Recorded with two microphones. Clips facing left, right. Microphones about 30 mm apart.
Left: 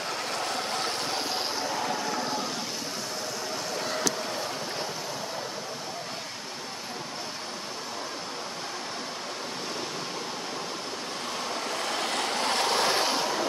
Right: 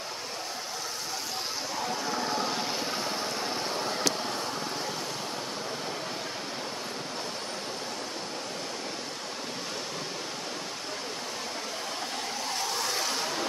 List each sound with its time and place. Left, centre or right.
1.6 s vehicle: centre
2.3 s vehicle: centre
12.0 s vehicle: left
12.9 s a sound: left
13.2 s music: centre